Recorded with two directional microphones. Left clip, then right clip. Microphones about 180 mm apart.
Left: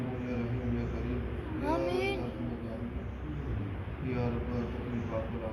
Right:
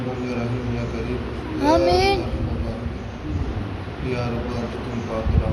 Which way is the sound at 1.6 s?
65° right (ahead or behind).